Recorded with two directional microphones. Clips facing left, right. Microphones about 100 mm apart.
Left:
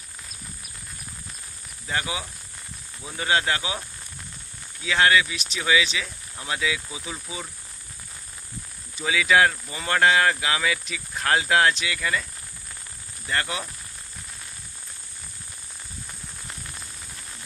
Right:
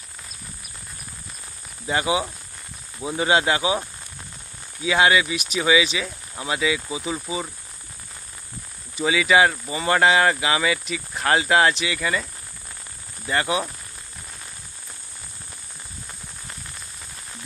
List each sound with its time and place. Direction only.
1.9 s speech: 20° right (ahead or behind)
4.8 s speech: 15° right (ahead or behind)
9.0 s speech: 5° right (ahead or behind)
13.2 s speech: 10° right (ahead or behind)